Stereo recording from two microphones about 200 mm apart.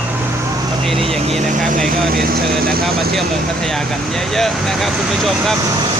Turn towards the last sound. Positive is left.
turn(degrees=0)  # may be behind; listen again after turning